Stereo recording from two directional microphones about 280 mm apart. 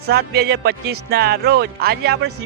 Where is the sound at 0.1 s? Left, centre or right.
Right.